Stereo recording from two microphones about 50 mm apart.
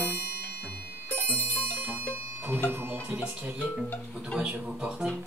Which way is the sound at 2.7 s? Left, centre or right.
Right.